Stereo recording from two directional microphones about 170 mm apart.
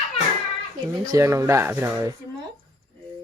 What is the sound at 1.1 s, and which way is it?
Speech, 20° right (ahead or behind).